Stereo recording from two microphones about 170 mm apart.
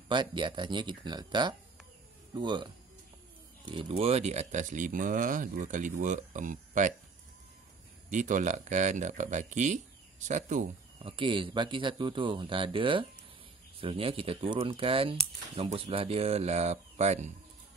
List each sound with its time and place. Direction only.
0.1 s speech: 25° right (ahead or behind); by 6.9 s 50° right (ahead or behind)
8.1 s speech: 45° right (ahead or behind)
11.0 s speech: 30° right (ahead or behind)